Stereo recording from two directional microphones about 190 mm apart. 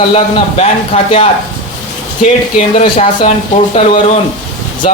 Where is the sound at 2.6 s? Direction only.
30° left (ahead or behind).